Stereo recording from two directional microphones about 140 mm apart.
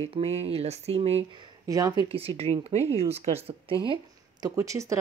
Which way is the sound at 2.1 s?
45° right (ahead or behind).